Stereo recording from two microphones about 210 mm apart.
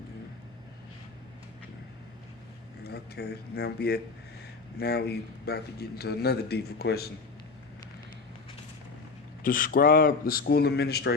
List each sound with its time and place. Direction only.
2.8 s a man's voice: 50° left (ahead or behind)
9.4 s a man's voice: 40° left (ahead or behind)